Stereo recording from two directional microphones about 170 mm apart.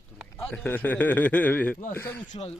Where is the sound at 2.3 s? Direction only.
40° left (ahead or behind).